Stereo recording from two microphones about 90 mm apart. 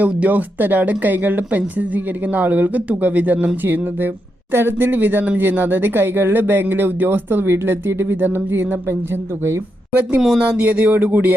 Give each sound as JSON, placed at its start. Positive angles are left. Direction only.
{"t": 0.0, "sound": "speech", "side_deg": -15}
{"t": 10.1, "sound": "speech", "side_deg": -5}